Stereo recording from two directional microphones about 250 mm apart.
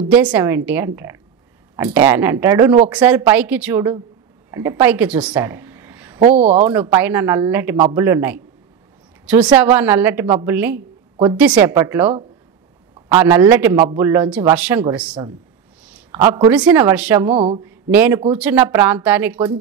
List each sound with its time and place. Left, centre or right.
0.1 s a woman's voice: centre
6.2 s speech: right
6.6 s a woman's voice: centre